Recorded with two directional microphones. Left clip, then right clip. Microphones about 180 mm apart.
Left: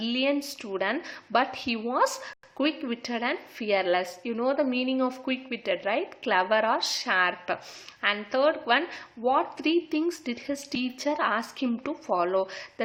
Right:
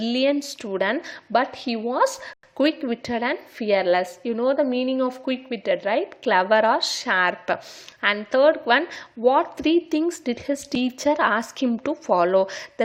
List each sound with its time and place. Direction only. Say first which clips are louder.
0.0 s a woman's voice: right 5 dB; 25° right (ahead or behind)